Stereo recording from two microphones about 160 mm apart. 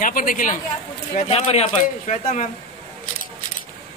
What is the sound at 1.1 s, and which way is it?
A man's voice, 40° left (ahead or behind).